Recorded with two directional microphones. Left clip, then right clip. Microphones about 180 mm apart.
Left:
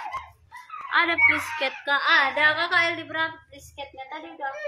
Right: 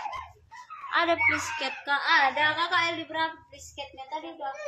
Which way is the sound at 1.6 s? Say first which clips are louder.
Left 4 dB; 25° right (ahead or behind).